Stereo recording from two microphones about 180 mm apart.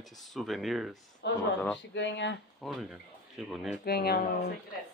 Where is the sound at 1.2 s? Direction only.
70° left (ahead or behind).